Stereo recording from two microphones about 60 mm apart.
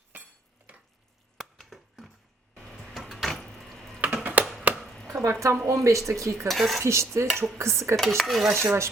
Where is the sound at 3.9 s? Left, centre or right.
Right.